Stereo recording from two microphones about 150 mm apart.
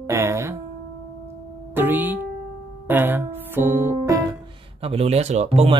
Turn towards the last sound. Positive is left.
turn(degrees=-45)  # may be behind; listen again after turning